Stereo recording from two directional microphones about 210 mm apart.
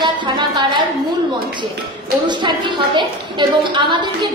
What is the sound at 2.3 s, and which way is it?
A woman's voice, 20° right (ahead or behind).